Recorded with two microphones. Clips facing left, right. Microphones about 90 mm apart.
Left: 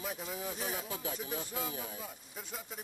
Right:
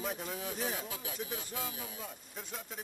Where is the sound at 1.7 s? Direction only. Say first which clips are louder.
Left 3 dB; 35° left (ahead or behind).